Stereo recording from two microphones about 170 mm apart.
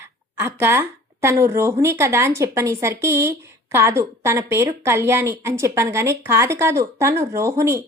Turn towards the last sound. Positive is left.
turn(degrees=-15)  # may be behind; listen again after turning